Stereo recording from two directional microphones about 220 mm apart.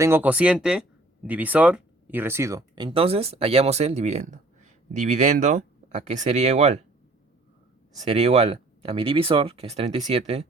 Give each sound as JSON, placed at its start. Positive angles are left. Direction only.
{"t": 0.0, "sound": "speech", "side_deg": -10}
{"t": 7.9, "sound": "speech", "side_deg": -30}